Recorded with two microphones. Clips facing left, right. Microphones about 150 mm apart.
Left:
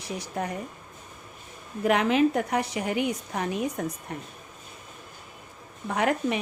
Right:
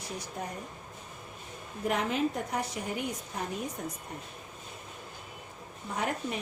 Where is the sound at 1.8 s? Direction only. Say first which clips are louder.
Left 8 dB; 85° left.